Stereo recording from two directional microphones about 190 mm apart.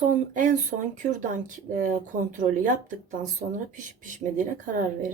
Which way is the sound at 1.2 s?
45° right (ahead or behind).